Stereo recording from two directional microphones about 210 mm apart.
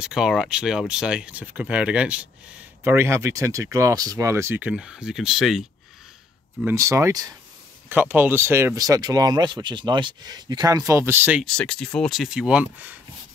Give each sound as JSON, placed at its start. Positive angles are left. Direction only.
{"t": 0.0, "sound": "speech", "side_deg": -5}
{"t": 6.6, "sound": "speech", "side_deg": -15}
{"t": 11.4, "sound": "speech", "side_deg": 5}